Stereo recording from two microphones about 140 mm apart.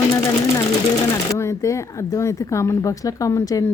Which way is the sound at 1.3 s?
20° left (ahead or behind).